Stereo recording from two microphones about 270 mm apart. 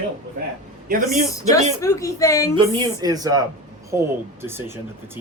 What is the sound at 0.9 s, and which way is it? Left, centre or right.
Speech, right.